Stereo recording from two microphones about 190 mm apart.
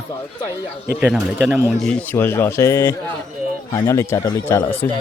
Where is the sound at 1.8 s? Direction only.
10° left (ahead or behind).